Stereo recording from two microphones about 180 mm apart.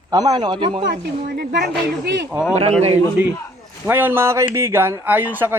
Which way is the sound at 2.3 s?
5° right (ahead or behind).